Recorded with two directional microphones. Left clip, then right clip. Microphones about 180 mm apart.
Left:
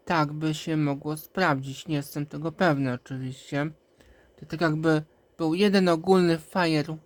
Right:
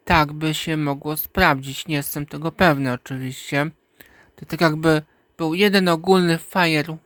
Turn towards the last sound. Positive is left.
turn(degrees=-20)  # may be behind; listen again after turning